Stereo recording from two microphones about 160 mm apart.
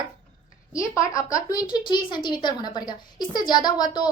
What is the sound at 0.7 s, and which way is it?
Speech, 20° left (ahead or behind).